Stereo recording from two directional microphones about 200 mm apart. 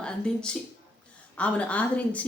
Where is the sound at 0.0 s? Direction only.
5° left (ahead or behind).